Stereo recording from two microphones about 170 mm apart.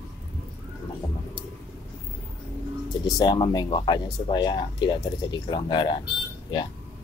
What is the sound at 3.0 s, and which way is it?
Speech, 25° left (ahead or behind).